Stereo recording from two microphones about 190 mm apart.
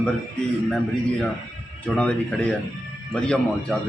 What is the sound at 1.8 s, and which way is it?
A man's voice, 5° left (ahead or behind).